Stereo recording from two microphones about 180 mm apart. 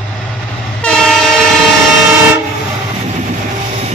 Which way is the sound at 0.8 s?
5° left (ahead or behind).